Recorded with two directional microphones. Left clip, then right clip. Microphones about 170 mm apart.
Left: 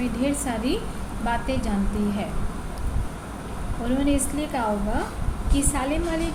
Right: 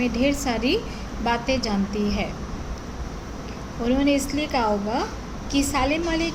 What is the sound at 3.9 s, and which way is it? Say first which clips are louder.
A woman's voice: right 3 dB; 40° right (ahead or behind).